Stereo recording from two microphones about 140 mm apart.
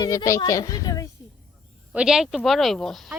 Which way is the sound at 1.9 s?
5° right (ahead or behind).